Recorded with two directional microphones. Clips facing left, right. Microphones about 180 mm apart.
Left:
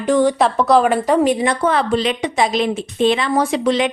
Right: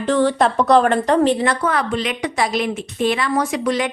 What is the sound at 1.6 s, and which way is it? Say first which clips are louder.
A woman's voice: left 4 dB; 25° left (ahead or behind).